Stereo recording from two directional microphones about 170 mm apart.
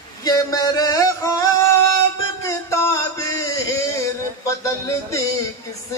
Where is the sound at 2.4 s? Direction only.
15° left (ahead or behind).